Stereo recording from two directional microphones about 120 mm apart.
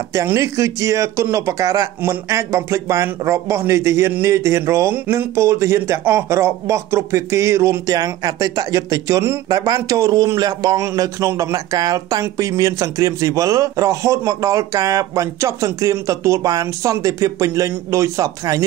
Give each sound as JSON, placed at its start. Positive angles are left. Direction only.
{"t": 0.1, "sound": "a man's voice", "side_deg": -25}